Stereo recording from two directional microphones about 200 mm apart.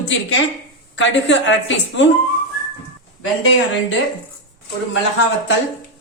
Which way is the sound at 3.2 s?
70° left (ahead or behind).